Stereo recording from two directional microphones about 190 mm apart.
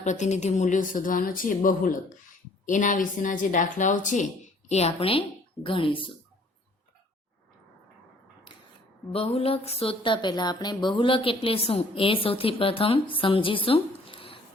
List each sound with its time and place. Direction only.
0.0 s speech: 40° left (ahead or behind)
9.1 s speech: 30° left (ahead or behind)